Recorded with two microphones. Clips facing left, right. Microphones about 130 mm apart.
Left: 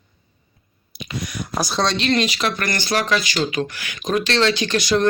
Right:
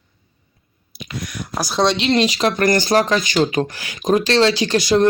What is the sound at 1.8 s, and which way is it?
Speech, 20° right (ahead or behind).